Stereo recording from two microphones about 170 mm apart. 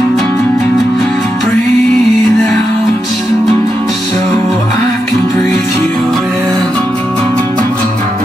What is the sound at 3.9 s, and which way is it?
Music, centre (ahead or behind).